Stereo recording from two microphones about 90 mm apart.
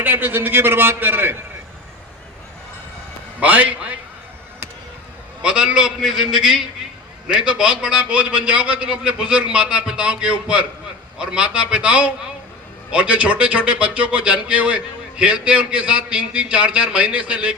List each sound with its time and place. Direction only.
0.0 s a man's voice: 20° right (ahead or behind)
3.4 s a man's voice: 15° right (ahead or behind)
5.4 s a man's voice: 10° right (ahead or behind)